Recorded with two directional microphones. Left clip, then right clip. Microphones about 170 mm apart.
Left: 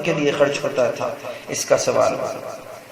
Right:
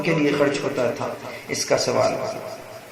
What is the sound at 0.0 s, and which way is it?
A man's voice, 25° left (ahead or behind).